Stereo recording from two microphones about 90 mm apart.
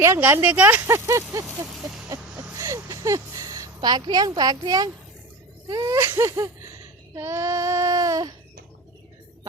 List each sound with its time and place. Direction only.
0.2 s speech: 20° right (ahead or behind); by 1.5 s 35° right (ahead or behind)
2.6 s a sound: 35° right (ahead or behind)
3.8 s speech: 55° right (ahead or behind)
6.0 s speech: 30° right (ahead or behind)
7.2 s child singing: 35° right (ahead or behind)